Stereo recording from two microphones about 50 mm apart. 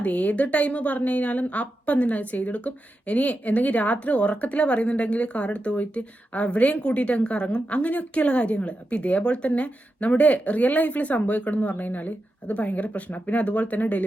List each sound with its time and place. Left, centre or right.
0.0 s a woman's voice: left